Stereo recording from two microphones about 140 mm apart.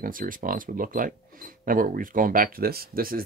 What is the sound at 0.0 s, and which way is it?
Speech, 80° right.